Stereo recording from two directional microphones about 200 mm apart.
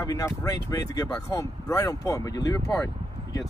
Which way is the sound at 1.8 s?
20° left (ahead or behind).